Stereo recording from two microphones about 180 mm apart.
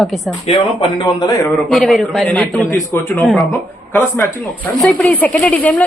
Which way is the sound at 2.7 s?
15° left (ahead or behind).